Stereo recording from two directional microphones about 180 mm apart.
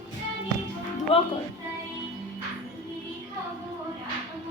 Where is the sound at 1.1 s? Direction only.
35° left (ahead or behind).